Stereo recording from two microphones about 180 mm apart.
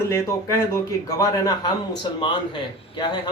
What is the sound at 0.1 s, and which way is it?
A man's voice, 15° left (ahead or behind).